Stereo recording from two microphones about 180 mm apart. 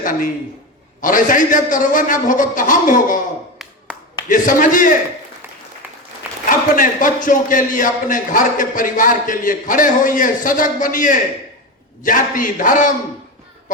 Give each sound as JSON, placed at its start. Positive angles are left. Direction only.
{"t": 0.0, "sound": "a man's voice", "side_deg": 50}
{"t": 4.3, "sound": "a man's voice", "side_deg": 45}
{"t": 6.5, "sound": "a man's voice", "side_deg": 45}